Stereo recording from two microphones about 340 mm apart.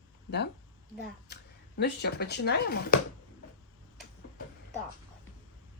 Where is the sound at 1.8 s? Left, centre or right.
Left.